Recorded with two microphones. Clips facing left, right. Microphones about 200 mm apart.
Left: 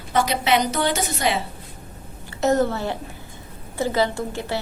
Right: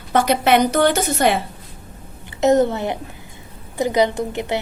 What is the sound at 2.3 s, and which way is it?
A woman's voice, 20° right (ahead or behind).